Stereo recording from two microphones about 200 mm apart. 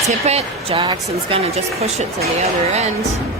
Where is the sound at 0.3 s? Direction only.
30° right (ahead or behind).